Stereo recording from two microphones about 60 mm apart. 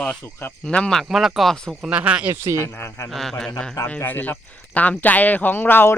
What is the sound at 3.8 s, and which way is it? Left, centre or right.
Speech, left.